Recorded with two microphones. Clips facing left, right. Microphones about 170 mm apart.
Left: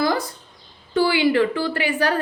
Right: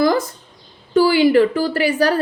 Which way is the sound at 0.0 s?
45° right (ahead or behind).